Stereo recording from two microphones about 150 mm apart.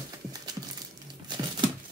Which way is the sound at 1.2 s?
30° right (ahead or behind).